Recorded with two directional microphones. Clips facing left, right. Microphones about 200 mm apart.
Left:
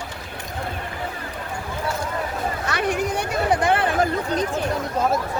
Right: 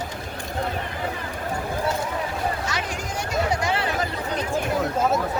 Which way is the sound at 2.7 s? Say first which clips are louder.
Left 7 dB; 60° left (ahead or behind).